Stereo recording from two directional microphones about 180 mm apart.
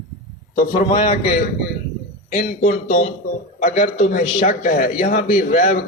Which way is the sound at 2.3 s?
45° left (ahead or behind).